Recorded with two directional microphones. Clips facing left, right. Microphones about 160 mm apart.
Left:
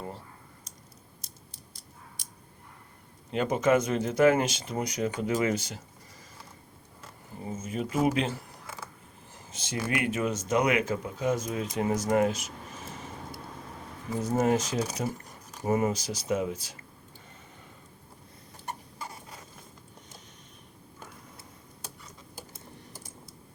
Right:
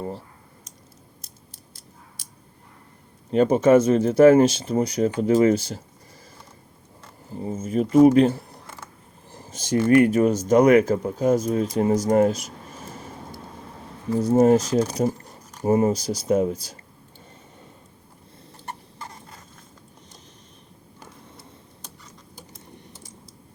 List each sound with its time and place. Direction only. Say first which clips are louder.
3.3 s speech: right 9 dB; 30° right (ahead or behind)
7.4 s speech: right 9 dB; 35° right (ahead or behind)
9.3 s a sound: right 10 dB; 40° right (ahead or behind)
9.9 s speech: right 13 dB; 40° right (ahead or behind)
14.3 s speech: right 9 dB; 35° right (ahead or behind)
18.9 s a sound: right 1 dB; 10° left (ahead or behind)